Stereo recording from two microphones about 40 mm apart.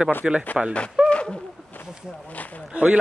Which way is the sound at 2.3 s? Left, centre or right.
Left.